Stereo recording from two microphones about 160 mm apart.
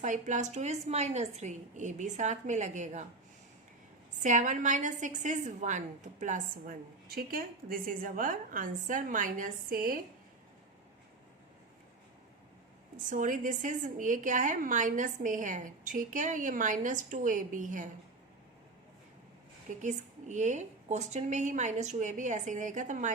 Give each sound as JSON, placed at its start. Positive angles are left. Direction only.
{"t": 0.0, "sound": "a woman's voice", "side_deg": -50}
{"t": 4.2, "sound": "a woman's voice", "side_deg": -50}
{"t": 13.1, "sound": "a woman's voice", "side_deg": -55}
{"t": 19.8, "sound": "a woman's voice", "side_deg": -50}